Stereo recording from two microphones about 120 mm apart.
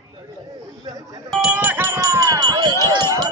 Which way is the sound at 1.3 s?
10° right (ahead or behind).